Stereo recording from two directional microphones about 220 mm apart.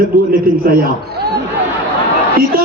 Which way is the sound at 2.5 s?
40° right (ahead or behind).